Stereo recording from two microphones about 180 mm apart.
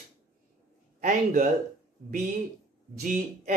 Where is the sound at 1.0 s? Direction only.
45° right (ahead or behind).